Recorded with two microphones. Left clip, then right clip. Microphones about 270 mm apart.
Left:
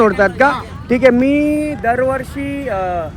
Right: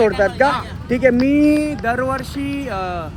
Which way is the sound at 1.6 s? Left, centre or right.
Centre.